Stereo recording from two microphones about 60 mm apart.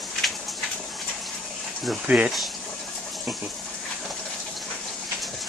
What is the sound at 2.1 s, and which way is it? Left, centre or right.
Speech, right.